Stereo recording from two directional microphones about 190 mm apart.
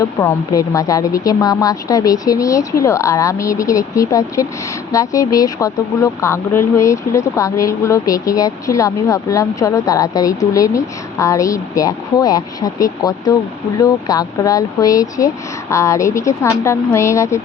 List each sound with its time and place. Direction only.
0.0 s speech: 15° left (ahead or behind)